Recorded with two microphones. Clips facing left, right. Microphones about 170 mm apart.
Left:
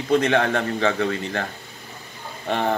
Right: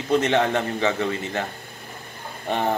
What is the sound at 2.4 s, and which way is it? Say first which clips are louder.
Speech: left 1 dB; 15° right (ahead or behind).